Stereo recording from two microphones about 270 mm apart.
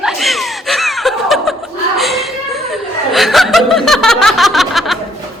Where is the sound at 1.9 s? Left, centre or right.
Centre.